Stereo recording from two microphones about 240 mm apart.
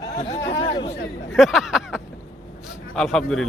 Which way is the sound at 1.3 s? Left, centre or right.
Centre.